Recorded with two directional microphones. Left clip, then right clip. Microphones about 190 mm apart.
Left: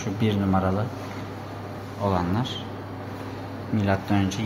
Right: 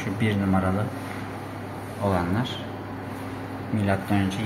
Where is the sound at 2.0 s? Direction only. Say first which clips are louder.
Even; 15° left (ahead or behind).